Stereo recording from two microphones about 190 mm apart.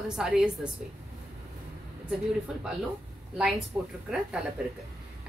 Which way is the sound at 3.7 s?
5° right (ahead or behind).